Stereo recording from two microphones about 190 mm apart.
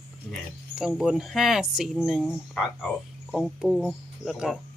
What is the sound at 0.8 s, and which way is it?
Speech, 5° right (ahead or behind).